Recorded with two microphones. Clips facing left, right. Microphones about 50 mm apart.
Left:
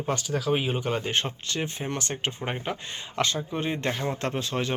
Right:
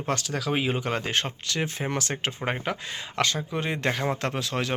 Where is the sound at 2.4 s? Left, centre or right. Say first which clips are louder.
Right 2 dB; right.